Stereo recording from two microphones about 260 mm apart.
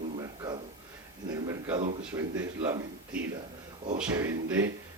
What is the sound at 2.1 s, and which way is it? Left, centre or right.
Speech, centre.